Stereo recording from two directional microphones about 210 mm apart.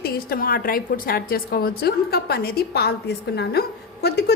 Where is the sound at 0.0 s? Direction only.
45° left (ahead or behind).